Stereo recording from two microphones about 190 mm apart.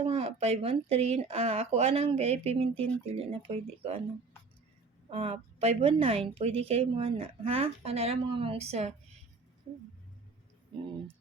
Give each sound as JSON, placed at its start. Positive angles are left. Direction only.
{"t": 0.0, "sound": "a woman's voice", "side_deg": -30}
{"t": 5.1, "sound": "a woman's voice", "side_deg": -30}